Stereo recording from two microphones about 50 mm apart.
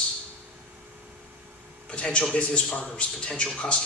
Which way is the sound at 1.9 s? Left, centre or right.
Left.